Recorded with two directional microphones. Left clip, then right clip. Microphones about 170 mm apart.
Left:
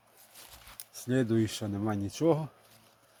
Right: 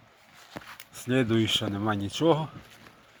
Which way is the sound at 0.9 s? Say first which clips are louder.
Right 3 dB; 5° right (ahead or behind).